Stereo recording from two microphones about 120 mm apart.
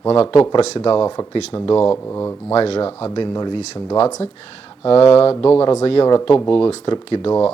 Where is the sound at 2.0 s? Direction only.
20° left (ahead or behind).